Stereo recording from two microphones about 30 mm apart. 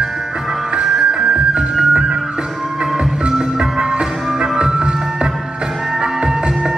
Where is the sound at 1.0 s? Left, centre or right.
Right.